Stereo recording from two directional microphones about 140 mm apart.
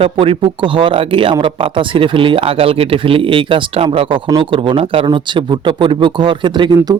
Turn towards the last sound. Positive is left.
turn(degrees=-35)  # may be behind; listen again after turning